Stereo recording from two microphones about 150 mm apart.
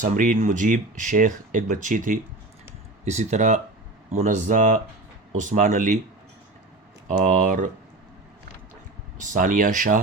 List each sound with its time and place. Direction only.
0.0 s speech: 60° right (ahead or behind)
3.0 s speech: 50° right (ahead or behind)
7.1 s speech: 60° right (ahead or behind)
9.1 s speech: 60° right (ahead or behind)